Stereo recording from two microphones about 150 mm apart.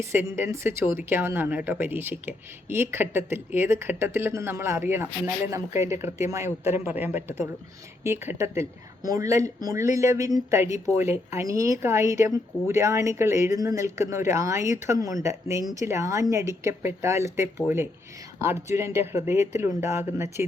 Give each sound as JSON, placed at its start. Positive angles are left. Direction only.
{"t": 0.0, "sound": "speech", "side_deg": -15}